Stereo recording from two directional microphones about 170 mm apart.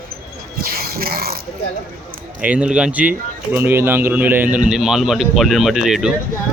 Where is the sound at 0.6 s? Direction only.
60° right (ahead or behind).